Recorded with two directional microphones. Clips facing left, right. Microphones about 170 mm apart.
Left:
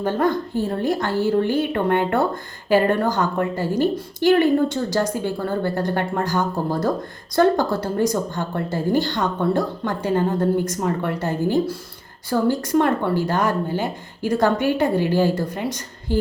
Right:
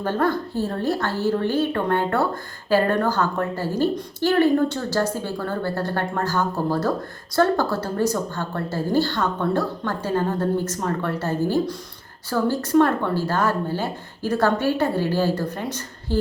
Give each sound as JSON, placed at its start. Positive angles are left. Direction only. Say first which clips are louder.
{"t": 0.0, "sound": "speech", "louder": "left 2 dB", "side_deg": 15}